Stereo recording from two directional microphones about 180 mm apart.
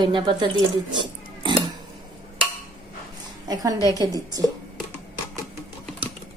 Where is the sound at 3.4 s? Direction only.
20° right (ahead or behind).